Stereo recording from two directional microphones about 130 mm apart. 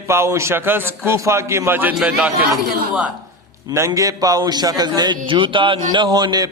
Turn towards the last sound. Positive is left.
turn(degrees=-30)  # may be behind; listen again after turning